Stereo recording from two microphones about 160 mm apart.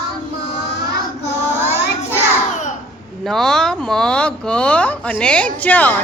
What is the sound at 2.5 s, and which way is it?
Babbling, 50° left (ahead or behind).